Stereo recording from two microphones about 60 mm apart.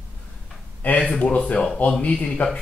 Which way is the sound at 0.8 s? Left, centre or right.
Left.